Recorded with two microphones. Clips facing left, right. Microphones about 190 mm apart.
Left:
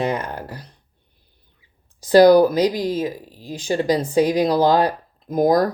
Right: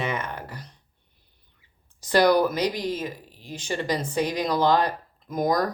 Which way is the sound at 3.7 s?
40° left (ahead or behind).